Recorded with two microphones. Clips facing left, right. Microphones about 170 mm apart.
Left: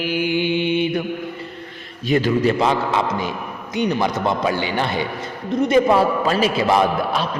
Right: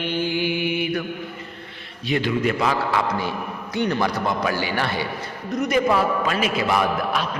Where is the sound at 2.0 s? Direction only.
40° left (ahead or behind).